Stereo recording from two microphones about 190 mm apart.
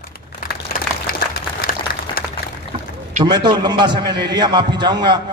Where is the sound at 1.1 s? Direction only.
50° left (ahead or behind).